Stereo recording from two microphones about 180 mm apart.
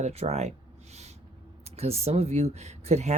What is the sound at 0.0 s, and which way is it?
Speech, 35° right (ahead or behind).